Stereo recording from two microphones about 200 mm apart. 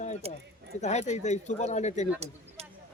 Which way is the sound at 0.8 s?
35° left (ahead or behind).